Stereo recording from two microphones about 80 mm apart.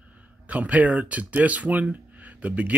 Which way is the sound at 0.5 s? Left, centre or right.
Centre.